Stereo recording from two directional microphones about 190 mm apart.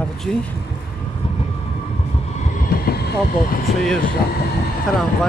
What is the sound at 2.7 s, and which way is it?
Vehicle, 55° left (ahead or behind).